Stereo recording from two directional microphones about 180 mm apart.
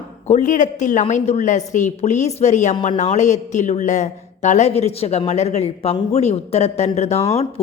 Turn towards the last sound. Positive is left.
turn(degrees=35)  # may be behind; listen again after turning